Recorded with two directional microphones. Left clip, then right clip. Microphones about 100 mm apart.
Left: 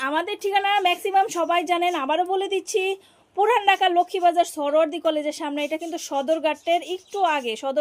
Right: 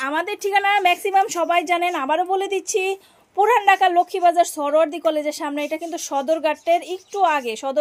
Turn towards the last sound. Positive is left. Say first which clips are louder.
# right 3 dB
turn(degrees=-15)  # may be behind; listen again after turning